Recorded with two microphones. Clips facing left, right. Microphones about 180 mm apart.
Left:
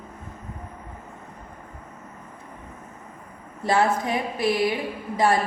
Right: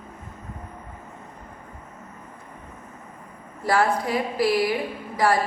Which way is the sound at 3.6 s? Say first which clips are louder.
Even; 20° left (ahead or behind).